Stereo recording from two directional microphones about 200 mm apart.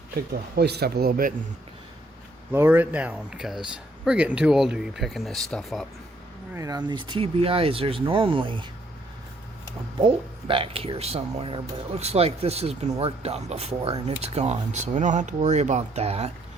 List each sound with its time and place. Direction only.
0.5 s speech: 55° right (ahead or behind)
2.5 s speech: 10° right (ahead or behind)
6.5 s speech: 15° right (ahead or behind)
10.0 s speech: 25° right (ahead or behind)